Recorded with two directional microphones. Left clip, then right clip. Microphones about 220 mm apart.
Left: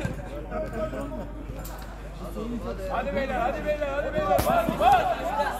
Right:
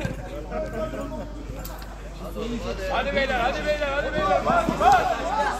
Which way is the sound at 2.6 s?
50° left (ahead or behind).